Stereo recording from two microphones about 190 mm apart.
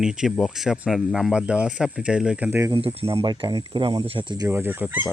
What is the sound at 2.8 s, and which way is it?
Speech, 30° right (ahead or behind).